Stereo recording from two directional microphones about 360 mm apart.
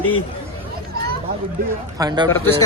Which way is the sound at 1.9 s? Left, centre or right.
Centre.